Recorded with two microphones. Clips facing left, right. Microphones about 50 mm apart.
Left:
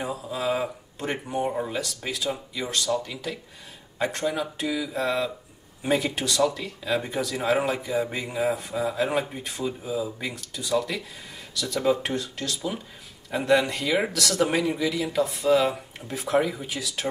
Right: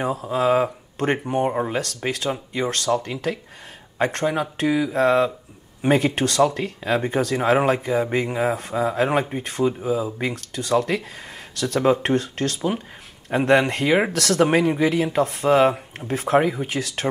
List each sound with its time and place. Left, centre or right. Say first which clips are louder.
0.0 s speech: right 7 dB; right